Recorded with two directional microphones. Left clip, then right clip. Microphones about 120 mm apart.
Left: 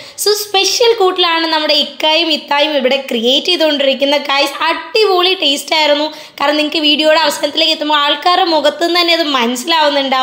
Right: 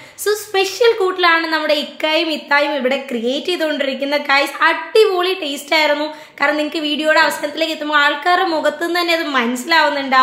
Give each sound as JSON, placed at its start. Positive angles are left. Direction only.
{"t": 0.2, "sound": "a woman's voice", "side_deg": 25}